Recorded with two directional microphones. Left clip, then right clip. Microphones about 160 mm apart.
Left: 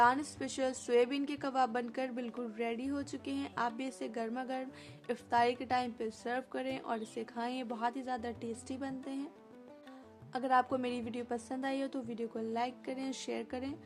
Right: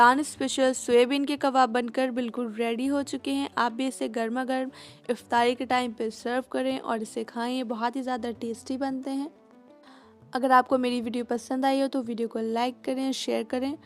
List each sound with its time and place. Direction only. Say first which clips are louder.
0.0 s speech: right 9 dB; 55° right (ahead or behind)
10.3 s speech: right 10 dB; 55° right (ahead or behind)